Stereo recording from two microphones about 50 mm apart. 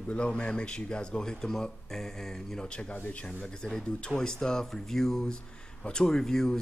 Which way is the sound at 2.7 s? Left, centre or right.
Left.